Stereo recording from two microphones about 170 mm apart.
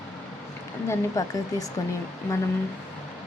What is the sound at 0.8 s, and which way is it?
Speech, 20° left (ahead or behind).